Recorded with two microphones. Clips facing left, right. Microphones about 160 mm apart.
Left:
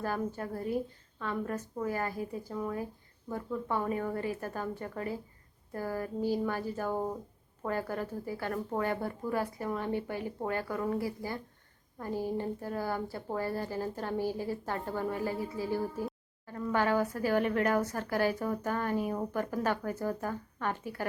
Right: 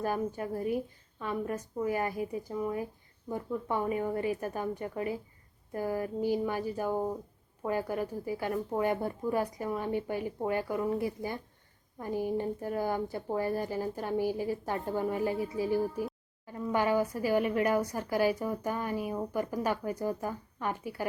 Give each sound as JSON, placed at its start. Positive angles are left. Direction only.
{"t": 0.0, "sound": "speech", "side_deg": -15}